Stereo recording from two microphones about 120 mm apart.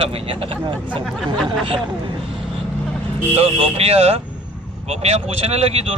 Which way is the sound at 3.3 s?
55° right (ahead or behind).